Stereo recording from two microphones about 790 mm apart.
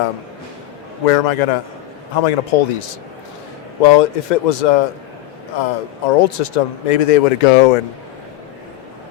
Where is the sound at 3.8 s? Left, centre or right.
Left.